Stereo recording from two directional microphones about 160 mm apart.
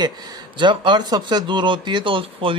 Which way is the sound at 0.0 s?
25° right (ahead or behind).